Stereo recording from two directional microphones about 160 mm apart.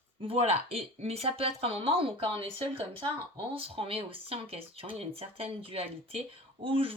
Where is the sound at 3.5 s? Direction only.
35° right (ahead or behind).